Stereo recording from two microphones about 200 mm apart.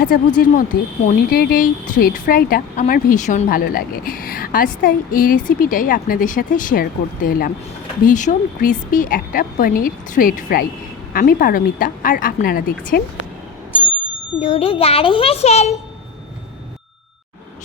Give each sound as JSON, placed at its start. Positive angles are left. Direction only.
{"t": 0.0, "sound": "a woman's voice", "side_deg": 45}
{"t": 14.4, "sound": "a child's voice", "side_deg": 30}